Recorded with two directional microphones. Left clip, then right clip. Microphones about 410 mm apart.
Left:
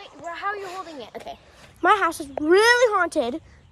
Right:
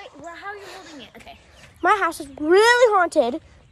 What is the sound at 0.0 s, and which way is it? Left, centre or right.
Speech, centre.